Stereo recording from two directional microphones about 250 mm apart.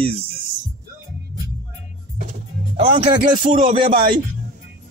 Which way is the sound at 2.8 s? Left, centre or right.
Right.